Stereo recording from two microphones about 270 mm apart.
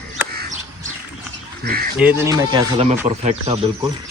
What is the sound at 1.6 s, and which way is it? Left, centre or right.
Bird, right.